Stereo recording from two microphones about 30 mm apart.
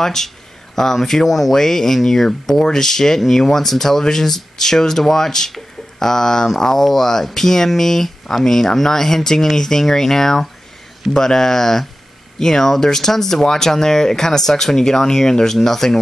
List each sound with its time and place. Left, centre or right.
0.0 s speech: centre
1.6 s speech: centre